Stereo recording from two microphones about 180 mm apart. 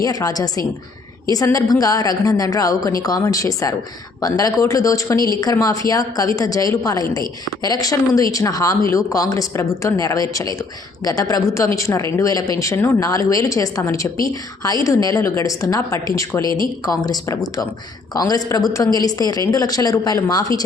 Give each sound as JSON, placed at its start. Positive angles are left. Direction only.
{"t": 0.0, "sound": "a woman's voice", "side_deg": 20}